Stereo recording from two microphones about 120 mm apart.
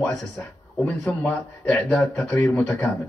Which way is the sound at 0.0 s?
10° left (ahead or behind).